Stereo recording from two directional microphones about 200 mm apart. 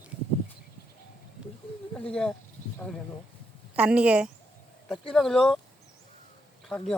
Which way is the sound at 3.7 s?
5° right (ahead or behind).